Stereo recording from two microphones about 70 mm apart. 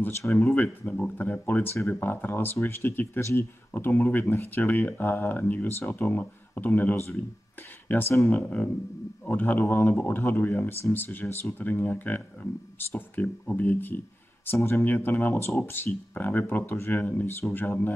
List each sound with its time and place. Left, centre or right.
0.4 s speech: left